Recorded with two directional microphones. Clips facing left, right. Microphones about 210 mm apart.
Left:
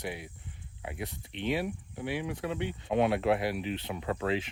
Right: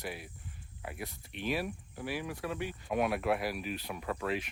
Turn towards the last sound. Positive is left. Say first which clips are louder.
# left 4 dB
turn(degrees=25)  # may be behind; listen again after turning